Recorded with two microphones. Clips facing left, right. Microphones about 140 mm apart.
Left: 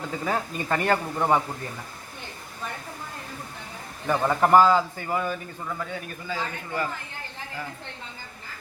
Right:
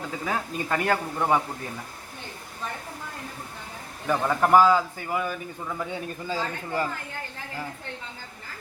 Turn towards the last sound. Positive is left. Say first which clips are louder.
# right 2 dB
turn(degrees=-30)  # may be behind; listen again after turning